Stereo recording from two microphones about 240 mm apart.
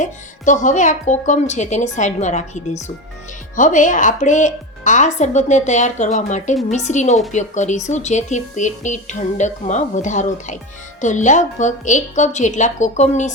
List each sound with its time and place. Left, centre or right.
0.0 s a woman's voice: left